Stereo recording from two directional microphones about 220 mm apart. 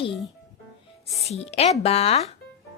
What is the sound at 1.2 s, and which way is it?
A woman's voice, 30° left (ahead or behind).